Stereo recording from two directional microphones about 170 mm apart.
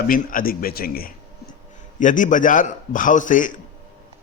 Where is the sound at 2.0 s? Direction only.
50° left (ahead or behind).